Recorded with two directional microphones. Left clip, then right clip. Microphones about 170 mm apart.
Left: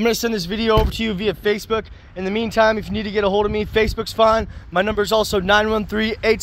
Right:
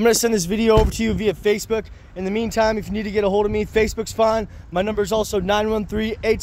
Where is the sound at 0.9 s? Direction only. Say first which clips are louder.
Even; 30° right (ahead or behind).